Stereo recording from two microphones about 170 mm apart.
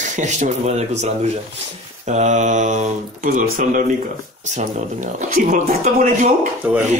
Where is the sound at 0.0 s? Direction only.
45° right (ahead or behind).